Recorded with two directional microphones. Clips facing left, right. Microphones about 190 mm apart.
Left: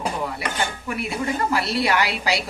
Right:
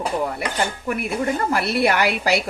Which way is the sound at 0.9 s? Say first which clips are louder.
Right 4 dB; 50° right (ahead or behind).